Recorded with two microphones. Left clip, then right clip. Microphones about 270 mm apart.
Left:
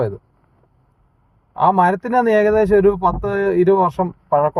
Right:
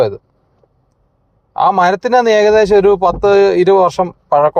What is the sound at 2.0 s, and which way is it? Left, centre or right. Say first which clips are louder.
A man's voice: right 5 dB; right.